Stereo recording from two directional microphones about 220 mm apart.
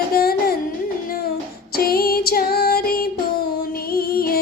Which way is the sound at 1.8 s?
45° left (ahead or behind).